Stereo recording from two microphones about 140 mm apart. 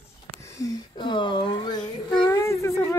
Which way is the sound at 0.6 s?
30° left (ahead or behind).